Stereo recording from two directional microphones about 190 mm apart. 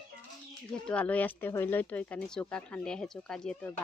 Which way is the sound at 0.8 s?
5° left (ahead or behind).